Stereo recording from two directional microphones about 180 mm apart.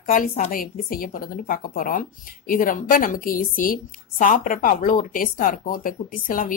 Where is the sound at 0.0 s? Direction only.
50° left (ahead or behind).